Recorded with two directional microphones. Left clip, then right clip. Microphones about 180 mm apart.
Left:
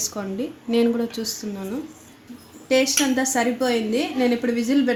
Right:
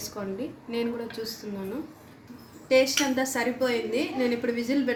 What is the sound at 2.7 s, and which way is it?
A woman's voice, 55° left (ahead or behind).